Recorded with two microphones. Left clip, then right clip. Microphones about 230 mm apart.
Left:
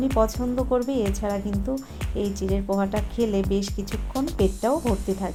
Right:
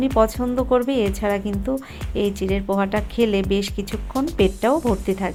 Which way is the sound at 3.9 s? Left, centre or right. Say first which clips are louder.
Right 4 dB; centre.